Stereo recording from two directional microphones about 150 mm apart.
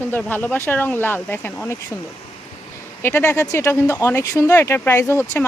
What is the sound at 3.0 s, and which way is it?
Speech, 15° left (ahead or behind).